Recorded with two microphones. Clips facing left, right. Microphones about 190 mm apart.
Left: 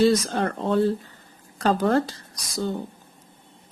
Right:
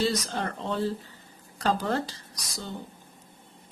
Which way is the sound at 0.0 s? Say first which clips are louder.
Left 8 dB; 50° left (ahead or behind).